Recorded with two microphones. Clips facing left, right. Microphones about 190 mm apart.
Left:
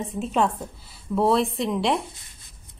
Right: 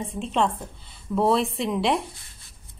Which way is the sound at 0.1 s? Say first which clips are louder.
Left 1 dB; 5° left (ahead or behind).